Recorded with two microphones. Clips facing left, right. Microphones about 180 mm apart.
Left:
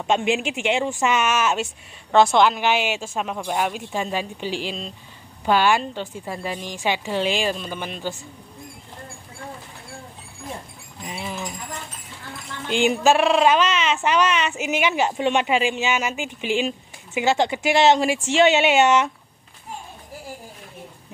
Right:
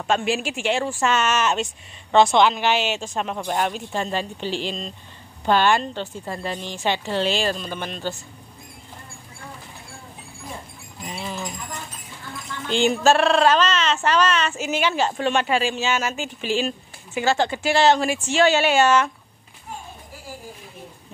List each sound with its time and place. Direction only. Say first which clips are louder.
0.0 s speech: left 1 dB; 20° left (ahead or behind)
11.1 s a sound: even; 10° left (ahead or behind)
12.6 s speech: even; 10° left (ahead or behind)